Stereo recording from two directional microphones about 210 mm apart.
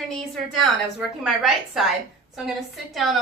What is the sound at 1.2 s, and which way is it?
A woman's voice, centre (ahead or behind).